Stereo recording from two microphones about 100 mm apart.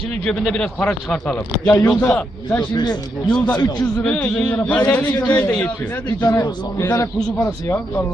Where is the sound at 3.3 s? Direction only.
10° left (ahead or behind).